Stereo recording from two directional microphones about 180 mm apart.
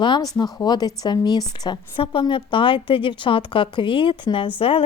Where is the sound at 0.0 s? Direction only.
25° left (ahead or behind).